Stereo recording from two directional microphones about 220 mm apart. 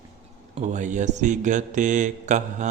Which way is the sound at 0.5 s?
35° right (ahead or behind).